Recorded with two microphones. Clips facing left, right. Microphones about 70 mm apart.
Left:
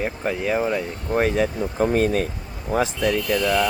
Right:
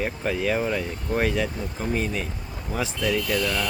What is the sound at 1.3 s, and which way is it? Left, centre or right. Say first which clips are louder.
Speech: left 6 dB; left.